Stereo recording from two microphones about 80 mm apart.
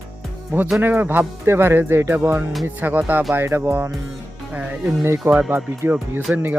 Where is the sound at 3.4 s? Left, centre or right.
Right.